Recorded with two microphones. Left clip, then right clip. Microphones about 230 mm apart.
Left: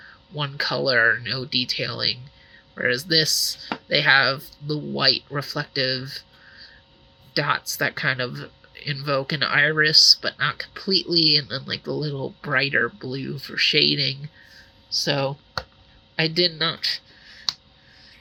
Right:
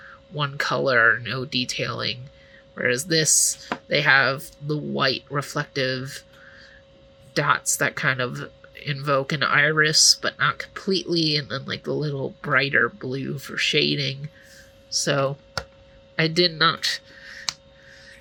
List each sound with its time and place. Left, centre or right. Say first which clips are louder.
0.3 s speech: right 1 dB; centre